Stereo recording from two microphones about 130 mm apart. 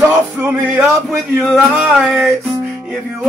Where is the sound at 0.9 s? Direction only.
Centre (ahead or behind).